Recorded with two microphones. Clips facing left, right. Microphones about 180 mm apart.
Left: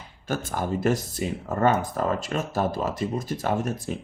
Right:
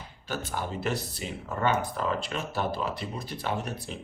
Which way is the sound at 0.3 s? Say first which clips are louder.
Left 6 dB; 45° left (ahead or behind).